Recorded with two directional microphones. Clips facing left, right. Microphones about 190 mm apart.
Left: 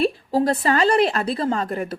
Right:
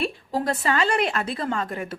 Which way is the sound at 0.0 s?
35° left (ahead or behind).